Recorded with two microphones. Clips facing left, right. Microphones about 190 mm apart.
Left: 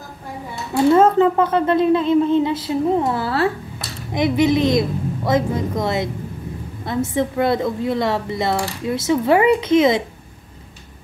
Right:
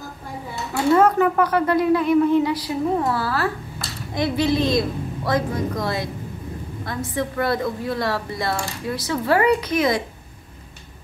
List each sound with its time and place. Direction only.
0.9 s speech: 25° left (ahead or behind)